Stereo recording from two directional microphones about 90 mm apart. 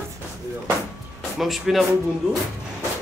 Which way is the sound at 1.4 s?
Centre (ahead or behind).